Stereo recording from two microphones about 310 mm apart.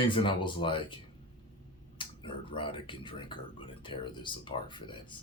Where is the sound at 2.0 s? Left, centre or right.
Centre.